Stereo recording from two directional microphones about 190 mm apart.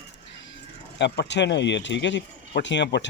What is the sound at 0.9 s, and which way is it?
Speech, 65° left (ahead or behind).